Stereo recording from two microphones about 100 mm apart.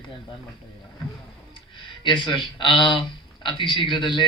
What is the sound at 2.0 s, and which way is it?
A man's voice, 50° left (ahead or behind).